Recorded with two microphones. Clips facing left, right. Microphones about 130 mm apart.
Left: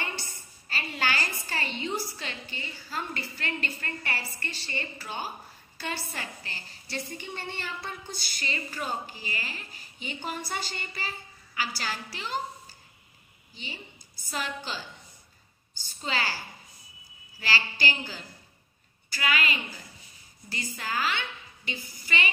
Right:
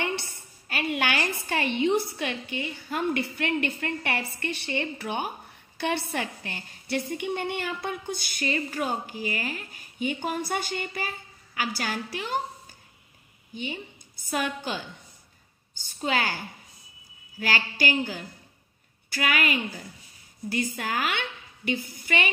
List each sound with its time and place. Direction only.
0.0 s a woman's voice: 60° right (ahead or behind)
13.6 s a woman's voice: 55° right (ahead or behind)